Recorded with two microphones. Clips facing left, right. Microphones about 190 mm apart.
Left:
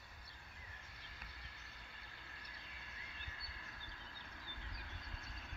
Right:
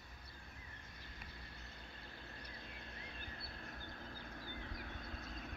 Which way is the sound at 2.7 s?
45° right (ahead or behind).